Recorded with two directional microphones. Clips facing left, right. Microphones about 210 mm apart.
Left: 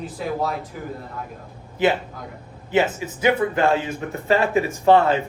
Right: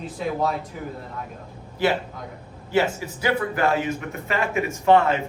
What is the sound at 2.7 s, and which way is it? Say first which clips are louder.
A man's voice: left 2 dB; 20° left (ahead or behind).